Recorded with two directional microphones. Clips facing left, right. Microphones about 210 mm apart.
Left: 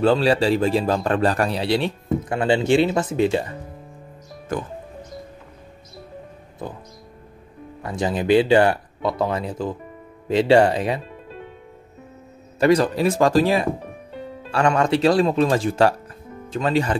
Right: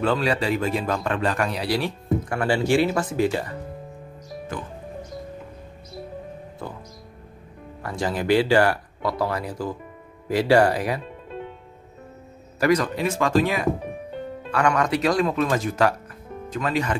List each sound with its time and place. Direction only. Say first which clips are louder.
0.0 s a man's voice: left 5 dB; 30° left (ahead or behind)
7.8 s a man's voice: left 3 dB; 20° left (ahead or behind)
12.5 s a man's voice: left 4 dB; 30° left (ahead or behind)